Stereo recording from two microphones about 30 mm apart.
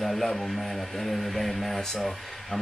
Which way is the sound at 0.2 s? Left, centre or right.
Centre.